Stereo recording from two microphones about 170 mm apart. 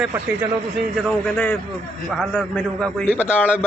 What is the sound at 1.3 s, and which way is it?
A man's voice, 10° left (ahead or behind).